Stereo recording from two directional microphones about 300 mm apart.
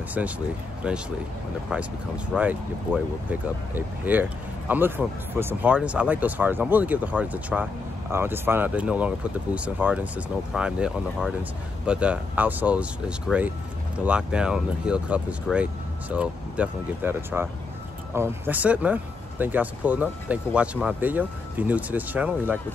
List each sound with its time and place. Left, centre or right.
0.2 s speech: centre